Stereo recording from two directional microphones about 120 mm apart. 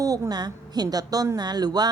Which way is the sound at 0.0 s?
30° right (ahead or behind).